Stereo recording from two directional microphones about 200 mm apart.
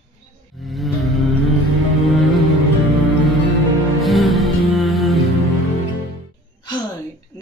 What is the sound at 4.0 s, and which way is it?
Music, centre (ahead or behind).